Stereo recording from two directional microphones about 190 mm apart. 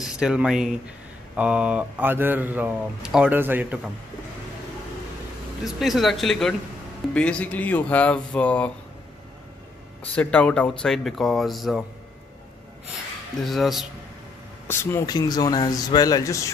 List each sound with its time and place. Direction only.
0.2 s speech: 5° right (ahead or behind)
5.6 s speech: centre (ahead or behind)
10.1 s speech: 5° left (ahead or behind)
13.4 s speech: centre (ahead or behind)
14.7 s speech: 15° left (ahead or behind)